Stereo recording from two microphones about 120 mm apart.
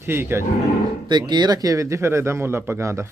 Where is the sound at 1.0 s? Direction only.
40° right (ahead or behind); by 3.1 s 20° right (ahead or behind).